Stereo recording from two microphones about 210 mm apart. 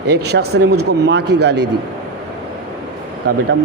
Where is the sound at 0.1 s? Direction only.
50° right (ahead or behind).